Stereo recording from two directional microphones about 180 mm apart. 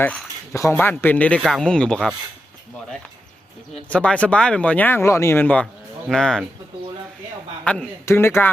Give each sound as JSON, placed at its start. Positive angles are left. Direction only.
{"t": 0.0, "sound": "speech", "side_deg": 15}
{"t": 3.8, "sound": "speech", "side_deg": 5}
{"t": 7.6, "sound": "speech", "side_deg": 5}